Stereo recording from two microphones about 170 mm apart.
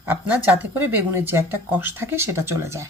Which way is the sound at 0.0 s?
10° right (ahead or behind).